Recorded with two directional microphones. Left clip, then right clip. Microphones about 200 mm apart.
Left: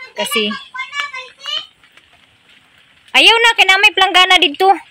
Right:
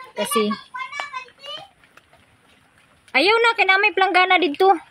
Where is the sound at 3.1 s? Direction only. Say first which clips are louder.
Left 7 dB; centre (ahead or behind).